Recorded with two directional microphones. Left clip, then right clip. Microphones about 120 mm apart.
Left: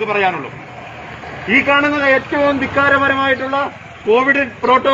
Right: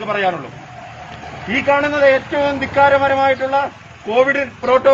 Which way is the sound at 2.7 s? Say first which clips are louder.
Right 3 dB; 35° right (ahead or behind).